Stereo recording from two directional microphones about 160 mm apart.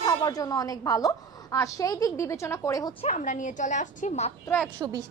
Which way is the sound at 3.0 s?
50° left (ahead or behind).